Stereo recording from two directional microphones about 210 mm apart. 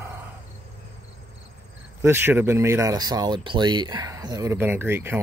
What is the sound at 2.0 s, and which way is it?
Speech, 10° right (ahead or behind).